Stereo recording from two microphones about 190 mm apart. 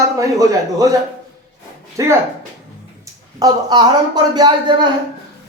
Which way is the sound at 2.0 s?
15° right (ahead or behind).